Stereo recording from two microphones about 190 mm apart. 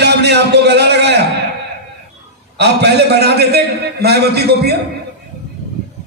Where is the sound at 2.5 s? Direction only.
60° right (ahead or behind).